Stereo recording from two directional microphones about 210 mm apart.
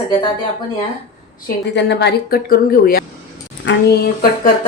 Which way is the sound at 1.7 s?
55° left (ahead or behind).